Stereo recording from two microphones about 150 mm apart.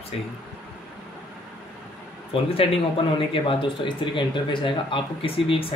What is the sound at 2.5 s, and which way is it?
Speech, 35° left (ahead or behind).